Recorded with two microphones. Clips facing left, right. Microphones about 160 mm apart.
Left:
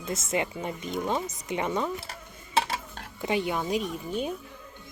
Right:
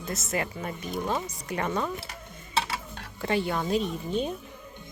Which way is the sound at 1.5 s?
15° left (ahead or behind).